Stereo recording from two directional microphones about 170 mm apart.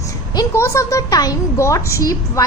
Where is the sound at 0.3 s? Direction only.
15° left (ahead or behind).